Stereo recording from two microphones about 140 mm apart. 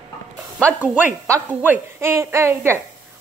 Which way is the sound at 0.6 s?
15° right (ahead or behind).